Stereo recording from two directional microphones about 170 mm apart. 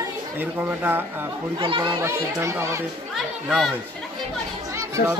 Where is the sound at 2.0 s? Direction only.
15° right (ahead or behind).